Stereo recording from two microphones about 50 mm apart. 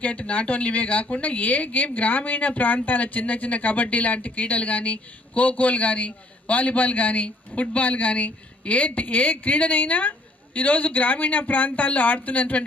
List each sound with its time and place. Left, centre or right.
0.0 s speech: left